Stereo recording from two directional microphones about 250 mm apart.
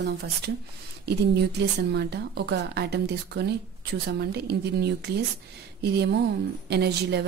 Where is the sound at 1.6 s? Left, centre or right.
Right.